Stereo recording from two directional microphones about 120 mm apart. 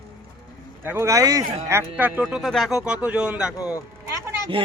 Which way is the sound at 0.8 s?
20° right (ahead or behind).